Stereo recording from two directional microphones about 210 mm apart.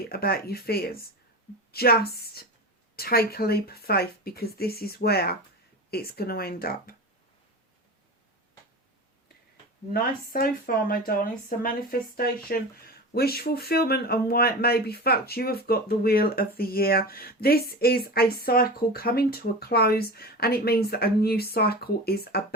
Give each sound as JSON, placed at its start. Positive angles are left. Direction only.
{"t": 0.1, "sound": "speech", "side_deg": 45}
{"t": 9.9, "sound": "speech", "side_deg": 45}